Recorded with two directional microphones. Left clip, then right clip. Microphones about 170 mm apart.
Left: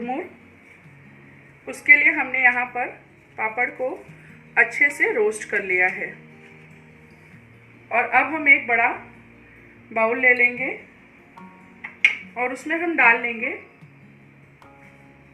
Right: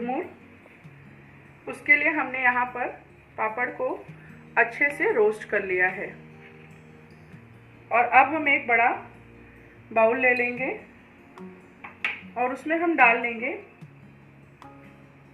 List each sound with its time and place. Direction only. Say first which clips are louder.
1.6 s a woman's voice: left 6 dB; centre (ahead or behind)
7.9 s a woman's voice: right 1 dB; 15° left (ahead or behind)
9.9 s a woman's voice: left 2 dB; centre (ahead or behind)
12.4 s a woman's voice: right 1 dB; 10° left (ahead or behind)